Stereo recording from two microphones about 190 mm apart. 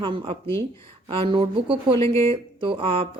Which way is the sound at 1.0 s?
25° right (ahead or behind).